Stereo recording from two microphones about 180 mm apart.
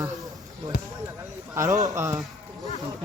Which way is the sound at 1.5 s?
15° right (ahead or behind).